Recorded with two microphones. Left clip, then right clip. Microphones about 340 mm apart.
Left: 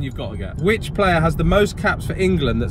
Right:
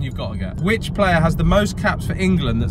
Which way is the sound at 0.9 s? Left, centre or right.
Right.